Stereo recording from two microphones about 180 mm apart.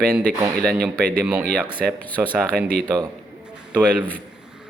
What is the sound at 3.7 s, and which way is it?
Speech, 10° left (ahead or behind).